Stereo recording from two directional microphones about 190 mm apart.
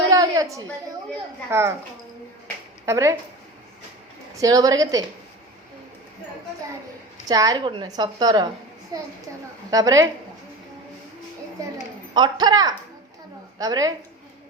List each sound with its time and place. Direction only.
0.1 s a sound: 20° right (ahead or behind)
1.5 s a woman's voice: 15° right (ahead or behind)
2.8 s a woman's voice: 15° right (ahead or behind)
4.4 s a woman's voice: 20° right (ahead or behind)
7.3 s a woman's voice: 20° right (ahead or behind)
12.1 s a woman's voice: 20° right (ahead or behind)